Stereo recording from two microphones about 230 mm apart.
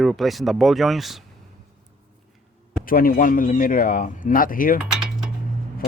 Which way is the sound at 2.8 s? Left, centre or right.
Left.